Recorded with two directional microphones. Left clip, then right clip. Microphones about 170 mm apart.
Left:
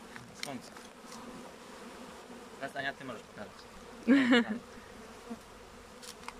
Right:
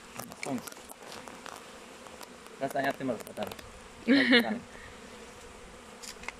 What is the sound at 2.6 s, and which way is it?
Speech, 20° right (ahead or behind).